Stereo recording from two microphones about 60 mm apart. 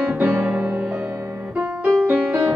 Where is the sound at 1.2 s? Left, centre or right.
Right.